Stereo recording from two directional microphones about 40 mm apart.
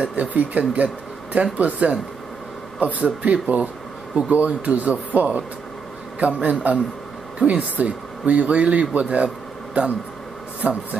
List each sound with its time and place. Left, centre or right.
0.0 s speech: right
10.6 s speech: right